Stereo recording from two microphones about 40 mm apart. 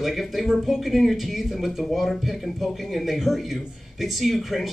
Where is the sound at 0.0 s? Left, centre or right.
Centre.